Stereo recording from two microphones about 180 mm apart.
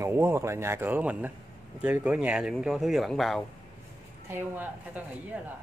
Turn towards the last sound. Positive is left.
turn(degrees=-10)  # may be behind; listen again after turning